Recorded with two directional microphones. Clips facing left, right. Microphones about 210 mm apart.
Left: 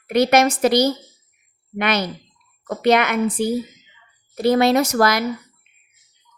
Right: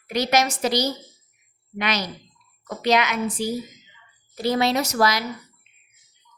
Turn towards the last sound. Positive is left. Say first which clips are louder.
# left 5 dB
turn(degrees=55)  # may be behind; listen again after turning